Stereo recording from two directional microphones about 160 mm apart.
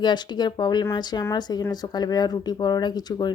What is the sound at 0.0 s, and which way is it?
Speech, 25° left (ahead or behind).